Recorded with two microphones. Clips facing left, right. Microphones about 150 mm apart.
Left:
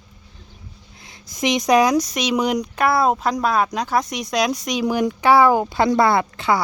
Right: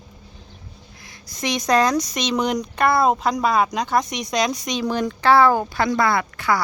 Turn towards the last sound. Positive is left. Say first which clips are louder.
# left 2 dB
turn(degrees=25)  # may be behind; listen again after turning